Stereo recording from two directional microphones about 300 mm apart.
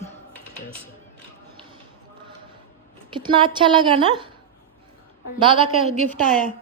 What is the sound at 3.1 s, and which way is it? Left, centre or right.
A woman's voice, centre.